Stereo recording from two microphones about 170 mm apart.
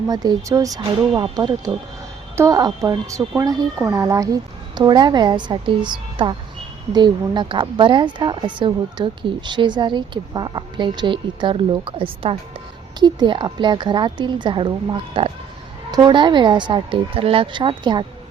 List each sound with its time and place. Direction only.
0.1 s a woman's voice: 25° right (ahead or behind)